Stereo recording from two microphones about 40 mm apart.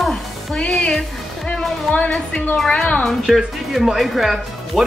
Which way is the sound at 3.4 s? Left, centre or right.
Centre.